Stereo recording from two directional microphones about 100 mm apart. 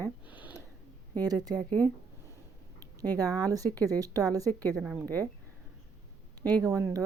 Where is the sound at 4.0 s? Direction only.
35° right (ahead or behind).